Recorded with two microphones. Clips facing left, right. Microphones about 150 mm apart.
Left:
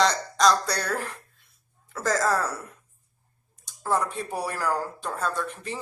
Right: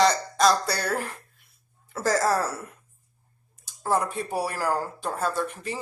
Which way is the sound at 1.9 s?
10° right (ahead or behind).